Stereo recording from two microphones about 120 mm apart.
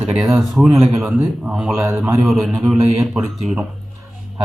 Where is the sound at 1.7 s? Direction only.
20° right (ahead or behind).